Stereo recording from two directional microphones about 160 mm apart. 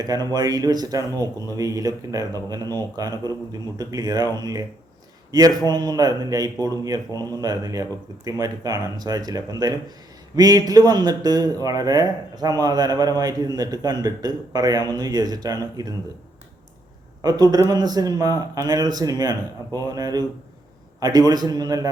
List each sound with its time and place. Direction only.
0.0 s speech: 25° right (ahead or behind)
17.2 s speech: 25° right (ahead or behind)